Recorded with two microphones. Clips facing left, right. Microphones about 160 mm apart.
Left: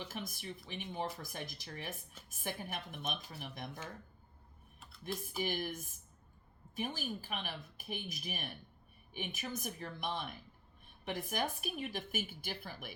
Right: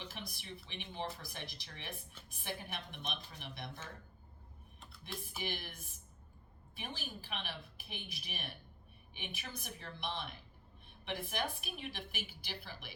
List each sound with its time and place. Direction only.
0.1 s a woman's voice: 45° left (ahead or behind)
5.4 s a woman's voice: 45° left (ahead or behind)